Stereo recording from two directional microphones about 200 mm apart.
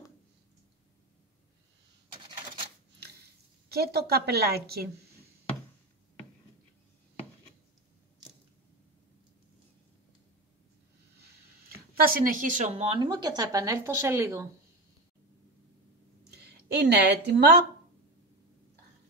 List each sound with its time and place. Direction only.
3.6 s a woman's voice: 55° right (ahead or behind)
12.0 s a woman's voice: 45° right (ahead or behind); by 14.5 s 15° right (ahead or behind)
16.3 s speech: 55° right (ahead or behind)